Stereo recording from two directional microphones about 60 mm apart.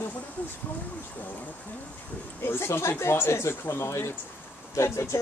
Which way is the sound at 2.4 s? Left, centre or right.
Left.